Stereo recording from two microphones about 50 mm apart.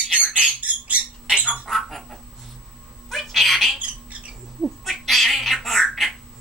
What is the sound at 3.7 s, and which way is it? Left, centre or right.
Squawk, right.